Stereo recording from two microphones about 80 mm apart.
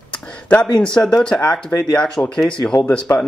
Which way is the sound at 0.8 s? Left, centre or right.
Centre.